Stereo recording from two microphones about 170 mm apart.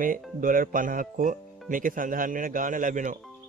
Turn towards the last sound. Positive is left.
turn(degrees=-50)  # may be behind; listen again after turning